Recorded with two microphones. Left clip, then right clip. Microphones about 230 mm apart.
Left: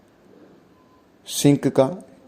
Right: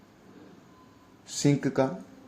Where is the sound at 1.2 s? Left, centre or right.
Left.